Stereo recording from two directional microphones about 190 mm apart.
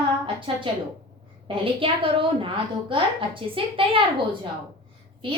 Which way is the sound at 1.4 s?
30° right (ahead or behind).